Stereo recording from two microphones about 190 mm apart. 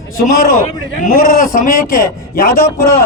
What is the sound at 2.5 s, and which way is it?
Speech, 15° left (ahead or behind).